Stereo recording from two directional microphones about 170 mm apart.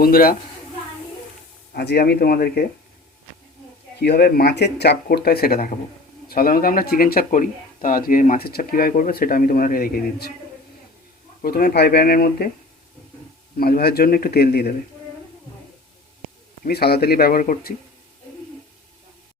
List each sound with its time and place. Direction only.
0.0 s speech: 60° left (ahead or behind)
1.7 s speech: 75° left (ahead or behind)
4.0 s speech: 70° left (ahead or behind)
11.4 s speech: 60° left (ahead or behind)
13.6 s speech: 65° left (ahead or behind)
16.6 s speech: 65° left (ahead or behind)